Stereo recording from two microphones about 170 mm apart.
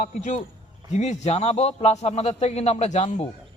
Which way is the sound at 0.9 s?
40° left (ahead or behind).